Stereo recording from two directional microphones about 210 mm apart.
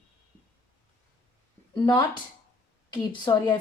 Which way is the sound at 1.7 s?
20° left (ahead or behind).